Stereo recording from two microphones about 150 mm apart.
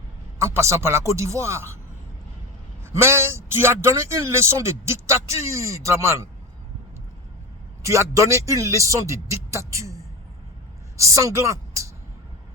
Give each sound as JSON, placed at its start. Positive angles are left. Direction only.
{"t": 0.4, "sound": "a man's voice", "side_deg": -20}
{"t": 2.8, "sound": "a man's voice", "side_deg": -15}
{"t": 7.8, "sound": "a man's voice", "side_deg": -20}